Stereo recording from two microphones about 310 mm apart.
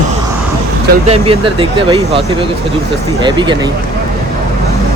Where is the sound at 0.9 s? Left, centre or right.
Right.